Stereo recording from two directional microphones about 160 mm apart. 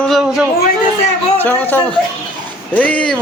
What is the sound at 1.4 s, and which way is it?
A man's voice, 10° left (ahead or behind).